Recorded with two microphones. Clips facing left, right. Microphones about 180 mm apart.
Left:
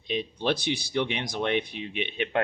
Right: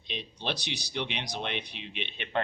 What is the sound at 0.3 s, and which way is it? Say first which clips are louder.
Speech: left 7 dB; 50° left (ahead or behind).